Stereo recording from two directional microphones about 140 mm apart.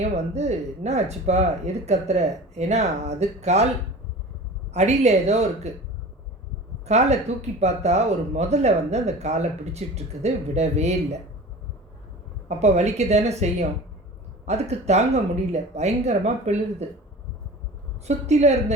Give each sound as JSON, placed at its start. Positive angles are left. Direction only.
{"t": 0.0, "sound": "speech", "side_deg": -55}
{"t": 4.7, "sound": "speech", "side_deg": -50}
{"t": 6.8, "sound": "speech", "side_deg": -50}
{"t": 12.5, "sound": "speech", "side_deg": -50}
{"t": 18.0, "sound": "speech", "side_deg": -55}